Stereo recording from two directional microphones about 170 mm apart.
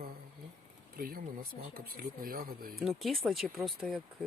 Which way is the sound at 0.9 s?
60° right (ahead or behind).